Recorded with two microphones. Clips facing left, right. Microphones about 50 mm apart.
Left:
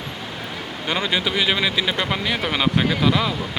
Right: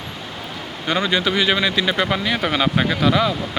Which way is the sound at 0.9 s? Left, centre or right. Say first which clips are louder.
Right 3 dB; centre.